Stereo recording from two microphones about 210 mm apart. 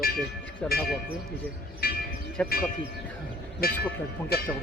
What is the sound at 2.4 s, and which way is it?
Speech, 5° left (ahead or behind).